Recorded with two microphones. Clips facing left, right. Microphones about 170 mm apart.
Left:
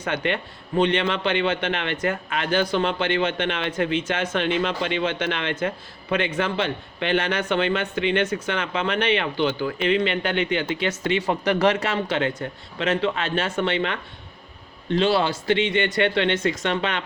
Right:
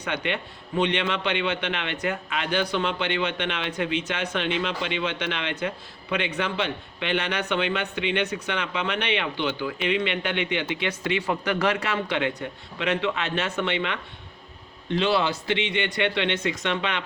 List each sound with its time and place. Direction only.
0.0 s a man's voice: 45° left (ahead or behind)